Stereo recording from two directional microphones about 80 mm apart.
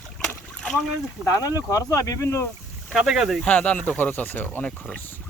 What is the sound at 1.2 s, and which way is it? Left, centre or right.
Speech, left.